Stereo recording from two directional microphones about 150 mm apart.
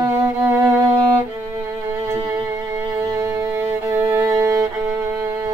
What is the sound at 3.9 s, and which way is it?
Music, 20° right (ahead or behind).